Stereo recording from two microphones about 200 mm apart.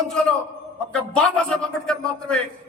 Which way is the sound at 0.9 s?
5° left (ahead or behind).